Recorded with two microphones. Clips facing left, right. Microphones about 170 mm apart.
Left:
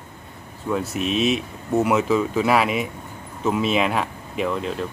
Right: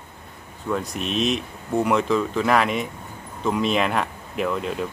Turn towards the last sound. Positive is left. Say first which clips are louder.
# even
turn(degrees=0)  # may be behind; listen again after turning